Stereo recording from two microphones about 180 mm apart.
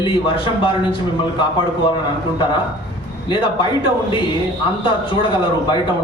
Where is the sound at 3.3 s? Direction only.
30° left (ahead or behind).